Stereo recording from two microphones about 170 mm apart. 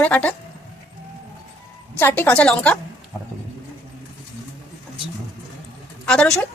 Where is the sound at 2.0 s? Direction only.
10° left (ahead or behind).